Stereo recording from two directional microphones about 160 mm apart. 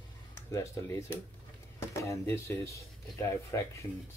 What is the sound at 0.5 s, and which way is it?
Speech, 20° left (ahead or behind).